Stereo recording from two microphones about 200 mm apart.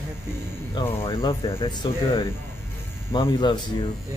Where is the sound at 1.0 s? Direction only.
25° left (ahead or behind).